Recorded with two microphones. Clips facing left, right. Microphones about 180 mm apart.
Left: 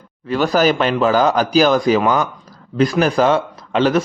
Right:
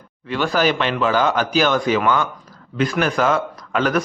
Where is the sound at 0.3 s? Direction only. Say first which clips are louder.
Left 4 dB; 40° left (ahead or behind).